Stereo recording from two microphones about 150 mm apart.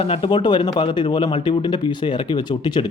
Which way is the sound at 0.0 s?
40° left (ahead or behind).